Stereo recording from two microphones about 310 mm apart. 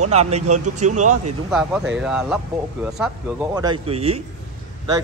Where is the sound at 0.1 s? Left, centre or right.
Right.